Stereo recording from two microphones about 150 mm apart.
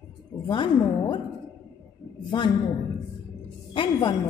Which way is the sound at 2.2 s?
30° left (ahead or behind).